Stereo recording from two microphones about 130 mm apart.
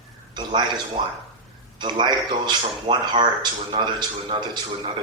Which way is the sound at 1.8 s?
35° right (ahead or behind).